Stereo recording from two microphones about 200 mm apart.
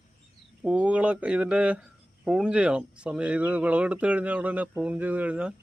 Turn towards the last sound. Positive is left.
turn(degrees=-5)  # may be behind; listen again after turning